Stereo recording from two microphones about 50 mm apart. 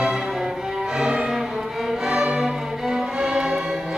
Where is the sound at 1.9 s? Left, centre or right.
Centre.